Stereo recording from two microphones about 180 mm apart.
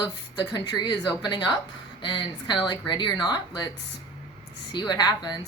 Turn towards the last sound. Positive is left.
turn(degrees=25)  # may be behind; listen again after turning